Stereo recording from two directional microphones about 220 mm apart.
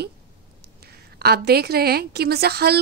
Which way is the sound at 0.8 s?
45° right (ahead or behind).